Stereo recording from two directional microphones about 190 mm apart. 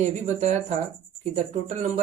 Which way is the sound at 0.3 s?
35° right (ahead or behind).